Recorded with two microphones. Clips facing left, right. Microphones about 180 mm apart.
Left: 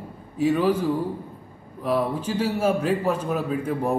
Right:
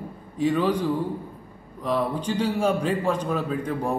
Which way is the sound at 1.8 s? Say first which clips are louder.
Left 1 dB; 5° left (ahead or behind).